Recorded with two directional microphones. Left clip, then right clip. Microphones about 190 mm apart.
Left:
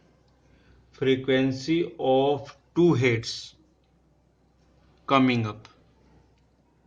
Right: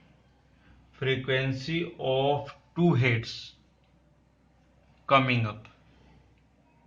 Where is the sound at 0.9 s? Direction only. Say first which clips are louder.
Left 5 dB; 65° left (ahead or behind).